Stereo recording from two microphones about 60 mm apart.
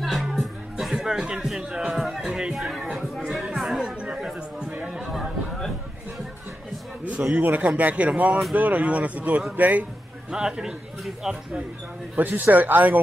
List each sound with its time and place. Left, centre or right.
0.0 s music: centre
2.2 s speech: centre
2.5 s speech: centre
3.3 s chatter: centre
3.8 s chatter: centre
4.3 s a sound: centre
4.8 s chatter: centre
7.1 s a man's voice: right
10.3 s speech: centre
12.2 s speech: right